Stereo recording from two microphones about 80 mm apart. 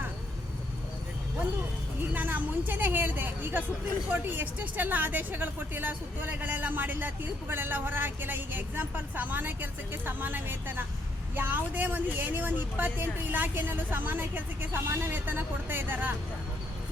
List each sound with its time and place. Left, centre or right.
2.1 s a woman's voice: right